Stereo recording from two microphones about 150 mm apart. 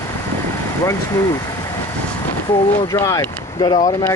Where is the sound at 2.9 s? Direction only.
20° left (ahead or behind).